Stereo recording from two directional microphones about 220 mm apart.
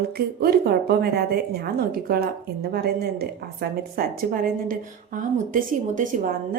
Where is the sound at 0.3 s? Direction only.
45° right (ahead or behind).